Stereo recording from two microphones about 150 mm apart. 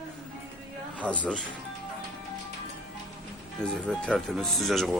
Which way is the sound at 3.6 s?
5° left (ahead or behind).